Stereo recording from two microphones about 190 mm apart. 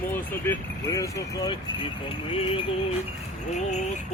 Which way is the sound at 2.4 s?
25° left (ahead or behind).